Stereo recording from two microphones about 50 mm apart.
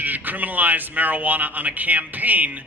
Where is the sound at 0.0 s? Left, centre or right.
Right.